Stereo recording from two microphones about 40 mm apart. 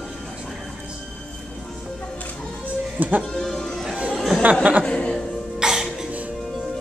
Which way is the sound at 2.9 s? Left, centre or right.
Right.